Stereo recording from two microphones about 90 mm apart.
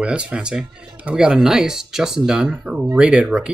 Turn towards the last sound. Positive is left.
turn(degrees=-10)  # may be behind; listen again after turning